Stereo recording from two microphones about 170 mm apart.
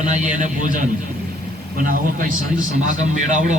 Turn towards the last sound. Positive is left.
turn(degrees=-45)  # may be behind; listen again after turning